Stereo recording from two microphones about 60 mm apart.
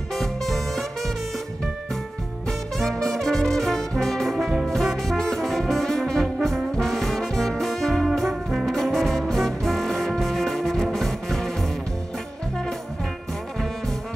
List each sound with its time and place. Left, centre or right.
0.1 s music: centre
2.8 s brass instrument: centre